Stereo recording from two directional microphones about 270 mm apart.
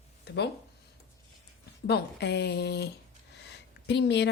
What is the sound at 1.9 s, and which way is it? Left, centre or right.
A woman's voice, left.